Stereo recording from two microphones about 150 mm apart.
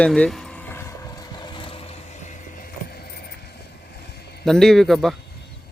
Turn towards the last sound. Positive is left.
turn(degrees=0)  # may be behind; listen again after turning